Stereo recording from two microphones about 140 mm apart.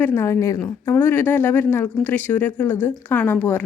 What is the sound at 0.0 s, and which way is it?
A woman's voice, 15° left (ahead or behind).